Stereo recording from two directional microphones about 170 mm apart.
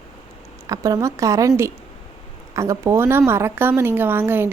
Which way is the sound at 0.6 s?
20° right (ahead or behind).